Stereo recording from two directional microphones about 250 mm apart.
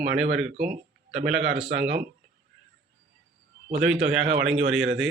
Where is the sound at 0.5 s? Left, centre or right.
Right.